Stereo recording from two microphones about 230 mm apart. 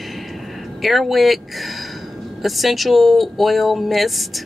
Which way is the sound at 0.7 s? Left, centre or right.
Centre.